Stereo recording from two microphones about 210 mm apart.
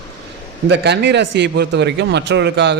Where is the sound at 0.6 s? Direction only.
55° right (ahead or behind).